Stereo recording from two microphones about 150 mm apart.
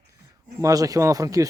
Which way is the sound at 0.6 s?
20° right (ahead or behind).